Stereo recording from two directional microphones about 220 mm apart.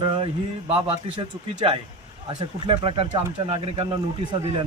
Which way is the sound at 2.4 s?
20° right (ahead or behind).